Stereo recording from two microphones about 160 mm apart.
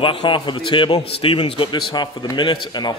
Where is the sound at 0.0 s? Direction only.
35° left (ahead or behind).